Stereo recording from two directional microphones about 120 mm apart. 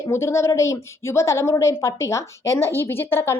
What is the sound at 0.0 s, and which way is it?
A woman's voice, 25° left (ahead or behind).